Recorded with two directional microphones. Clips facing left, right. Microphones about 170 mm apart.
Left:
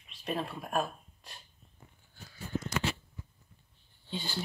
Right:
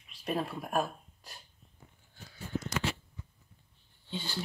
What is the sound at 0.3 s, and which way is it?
Speech, 10° right (ahead or behind).